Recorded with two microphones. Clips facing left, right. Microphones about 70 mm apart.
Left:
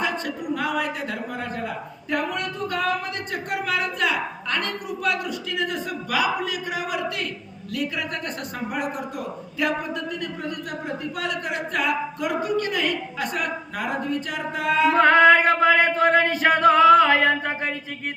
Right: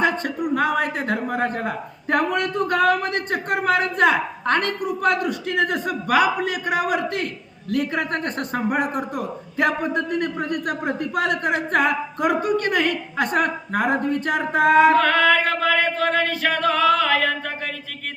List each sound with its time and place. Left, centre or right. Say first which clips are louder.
0.0 s a man's voice: right 5 dB; right
14.9 s a capella: left 2 dB; left